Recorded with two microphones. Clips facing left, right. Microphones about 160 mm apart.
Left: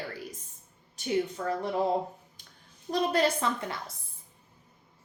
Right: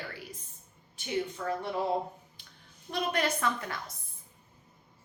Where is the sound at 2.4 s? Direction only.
45° left (ahead or behind).